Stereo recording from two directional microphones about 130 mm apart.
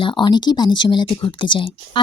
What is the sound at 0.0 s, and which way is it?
Speech, 35° left (ahead or behind).